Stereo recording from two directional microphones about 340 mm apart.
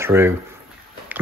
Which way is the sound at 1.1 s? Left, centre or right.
Centre.